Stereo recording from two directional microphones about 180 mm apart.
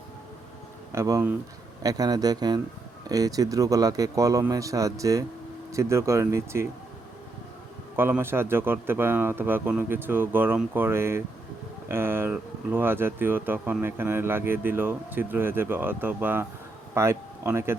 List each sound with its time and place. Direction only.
0.9 s speech: 15° right (ahead or behind)
7.9 s speech: 10° right (ahead or behind)